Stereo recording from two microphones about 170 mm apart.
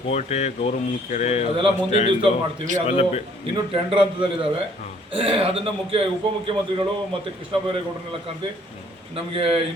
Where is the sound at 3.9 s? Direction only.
30° right (ahead or behind).